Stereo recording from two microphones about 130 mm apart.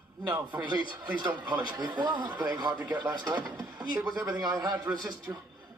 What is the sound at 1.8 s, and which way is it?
Speech, 35° right (ahead or behind).